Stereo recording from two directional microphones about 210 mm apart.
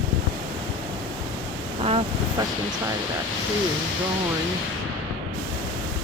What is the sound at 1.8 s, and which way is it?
Vehicle, 30° right (ahead or behind).